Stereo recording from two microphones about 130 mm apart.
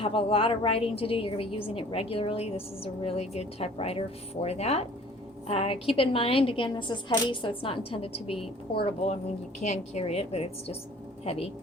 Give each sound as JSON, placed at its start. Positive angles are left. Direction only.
{"t": 0.0, "sound": "a woman's voice", "side_deg": 45}
{"t": 9.6, "sound": "a woman's voice", "side_deg": 60}